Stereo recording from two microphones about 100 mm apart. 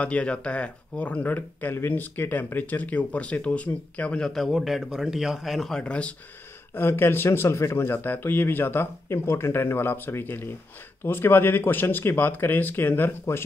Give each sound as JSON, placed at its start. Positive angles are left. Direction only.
{"t": 0.0, "sound": "speech", "side_deg": 10}
{"t": 6.7, "sound": "speech", "side_deg": 20}